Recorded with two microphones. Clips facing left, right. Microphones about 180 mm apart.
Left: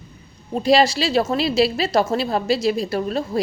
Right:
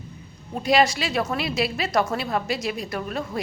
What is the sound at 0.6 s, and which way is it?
A woman's voice, 30° left (ahead or behind).